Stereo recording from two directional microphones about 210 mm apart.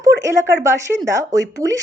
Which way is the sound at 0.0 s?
15° right (ahead or behind).